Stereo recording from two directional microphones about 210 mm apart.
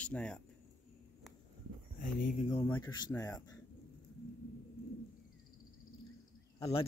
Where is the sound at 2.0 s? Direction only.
35° left (ahead or behind).